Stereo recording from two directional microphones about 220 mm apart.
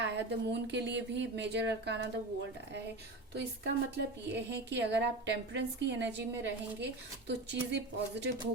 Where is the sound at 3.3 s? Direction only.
50° right (ahead or behind).